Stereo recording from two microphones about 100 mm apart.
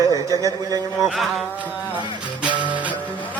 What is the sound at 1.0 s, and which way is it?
Music, centre (ahead or behind).